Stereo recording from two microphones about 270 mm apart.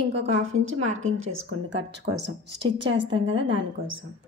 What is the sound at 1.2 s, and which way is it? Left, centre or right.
A woman's voice, right.